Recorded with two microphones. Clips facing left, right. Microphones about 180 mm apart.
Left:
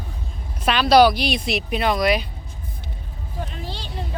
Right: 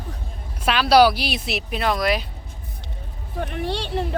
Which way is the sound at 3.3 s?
65° right (ahead or behind).